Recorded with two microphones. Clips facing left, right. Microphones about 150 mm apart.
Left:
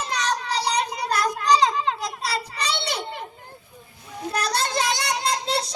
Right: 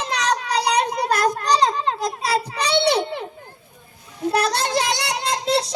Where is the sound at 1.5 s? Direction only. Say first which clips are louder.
Left 3 dB; 35° right (ahead or behind); by 3.0 s 60° right (ahead or behind).